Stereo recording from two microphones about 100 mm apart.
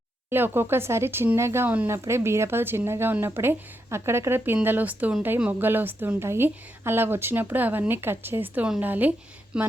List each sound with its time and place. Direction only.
0.3 s speech: 20° right (ahead or behind)